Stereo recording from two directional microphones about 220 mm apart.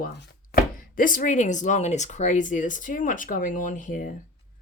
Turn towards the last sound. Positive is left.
turn(degrees=35)  # may be behind; listen again after turning